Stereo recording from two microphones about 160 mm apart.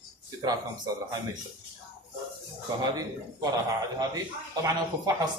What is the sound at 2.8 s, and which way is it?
Speech, 25° right (ahead or behind).